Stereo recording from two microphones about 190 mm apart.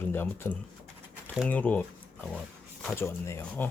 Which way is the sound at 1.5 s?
10° left (ahead or behind).